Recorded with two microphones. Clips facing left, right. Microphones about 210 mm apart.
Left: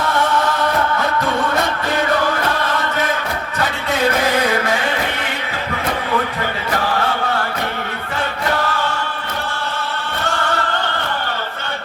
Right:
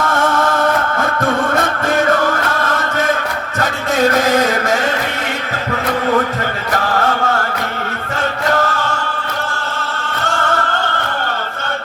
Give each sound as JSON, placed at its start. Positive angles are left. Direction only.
{"t": 0.1, "sound": "music", "side_deg": -45}
{"t": 3.6, "sound": "a sound", "side_deg": -45}
{"t": 8.5, "sound": "choir", "side_deg": -45}